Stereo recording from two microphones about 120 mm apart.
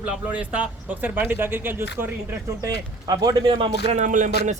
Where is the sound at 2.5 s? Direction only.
30° right (ahead or behind).